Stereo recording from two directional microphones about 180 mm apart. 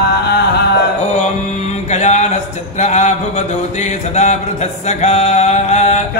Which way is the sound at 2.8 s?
40° left (ahead or behind).